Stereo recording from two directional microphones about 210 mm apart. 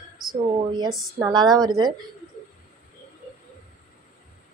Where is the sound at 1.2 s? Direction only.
20° right (ahead or behind).